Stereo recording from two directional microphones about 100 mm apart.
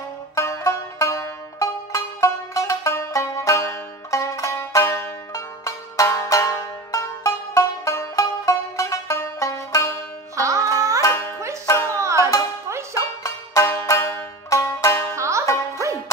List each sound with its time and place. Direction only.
0.4 s music: 30° left (ahead or behind)
10.3 s music: 35° right (ahead or behind)
11.6 s music: 25° left (ahead or behind)
12.0 s music: 30° right (ahead or behind)
12.9 s banjo: 30° left (ahead or behind)
15.1 s music: 30° right (ahead or behind)